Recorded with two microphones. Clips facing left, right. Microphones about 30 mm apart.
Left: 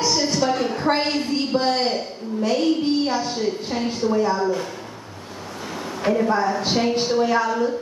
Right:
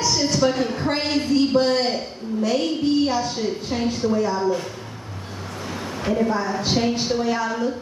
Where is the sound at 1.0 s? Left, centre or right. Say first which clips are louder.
Right 3 dB; centre.